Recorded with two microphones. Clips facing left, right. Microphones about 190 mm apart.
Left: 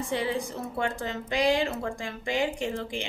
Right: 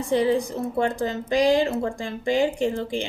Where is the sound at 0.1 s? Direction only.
35° right (ahead or behind).